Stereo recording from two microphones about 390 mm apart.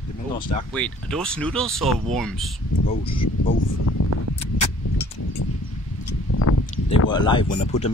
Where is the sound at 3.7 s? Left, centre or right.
Left.